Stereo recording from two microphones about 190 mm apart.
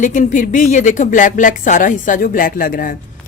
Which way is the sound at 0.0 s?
40° left (ahead or behind).